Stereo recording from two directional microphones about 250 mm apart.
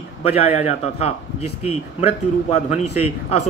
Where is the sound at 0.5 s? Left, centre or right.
Left.